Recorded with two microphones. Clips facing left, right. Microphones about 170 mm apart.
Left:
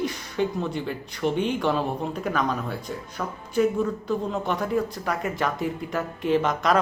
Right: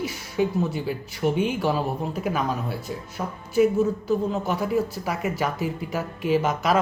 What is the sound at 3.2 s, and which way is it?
Speech, 20° right (ahead or behind).